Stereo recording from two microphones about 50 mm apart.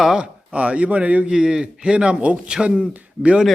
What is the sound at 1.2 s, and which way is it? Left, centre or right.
A man's voice, centre.